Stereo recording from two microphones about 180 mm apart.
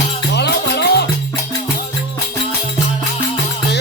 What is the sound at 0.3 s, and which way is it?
Music, 65° left (ahead or behind).